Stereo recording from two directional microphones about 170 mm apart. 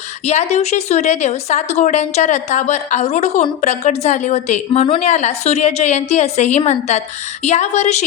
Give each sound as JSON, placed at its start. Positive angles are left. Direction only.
{"t": 0.3, "sound": "a woman's voice", "side_deg": 40}